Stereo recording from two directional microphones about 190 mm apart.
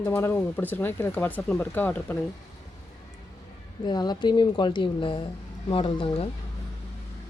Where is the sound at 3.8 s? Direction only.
20° left (ahead or behind).